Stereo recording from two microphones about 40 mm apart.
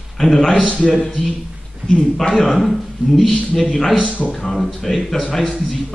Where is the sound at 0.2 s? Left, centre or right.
Centre.